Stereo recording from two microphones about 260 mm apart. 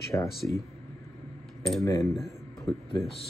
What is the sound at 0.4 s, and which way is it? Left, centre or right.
Speech, centre.